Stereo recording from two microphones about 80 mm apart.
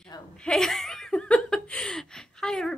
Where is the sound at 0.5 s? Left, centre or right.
Centre.